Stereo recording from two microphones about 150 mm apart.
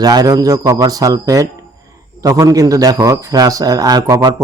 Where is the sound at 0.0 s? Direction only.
25° right (ahead or behind).